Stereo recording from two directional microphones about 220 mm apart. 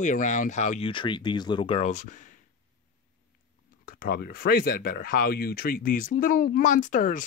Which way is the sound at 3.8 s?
40° left (ahead or behind).